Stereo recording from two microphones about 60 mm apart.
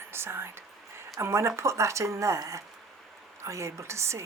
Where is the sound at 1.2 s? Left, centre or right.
Right.